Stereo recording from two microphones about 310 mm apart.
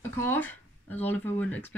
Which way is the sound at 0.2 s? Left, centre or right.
Centre.